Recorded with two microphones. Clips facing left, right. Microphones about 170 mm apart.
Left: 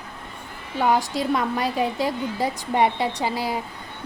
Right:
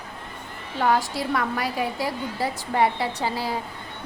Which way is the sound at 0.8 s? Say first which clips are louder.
Left 1 dB; 15° left (ahead or behind).